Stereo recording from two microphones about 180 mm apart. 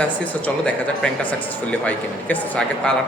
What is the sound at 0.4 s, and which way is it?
Speech, 5° left (ahead or behind).